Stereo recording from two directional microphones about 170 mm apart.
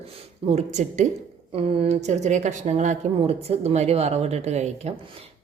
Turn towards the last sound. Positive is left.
turn(degrees=-40)  # may be behind; listen again after turning